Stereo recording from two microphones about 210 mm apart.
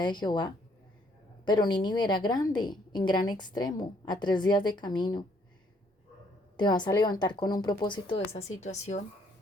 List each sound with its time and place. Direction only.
0.0 s speech: 20° left (ahead or behind)
6.6 s speech: 20° left (ahead or behind)